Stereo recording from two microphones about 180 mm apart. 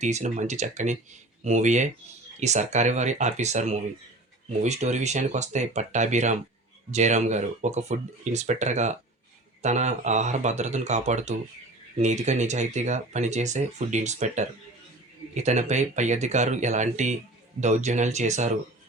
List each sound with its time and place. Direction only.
0.0 s speech: 40° right (ahead or behind)